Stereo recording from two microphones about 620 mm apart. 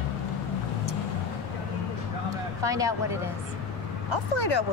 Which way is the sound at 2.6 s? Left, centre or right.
Centre.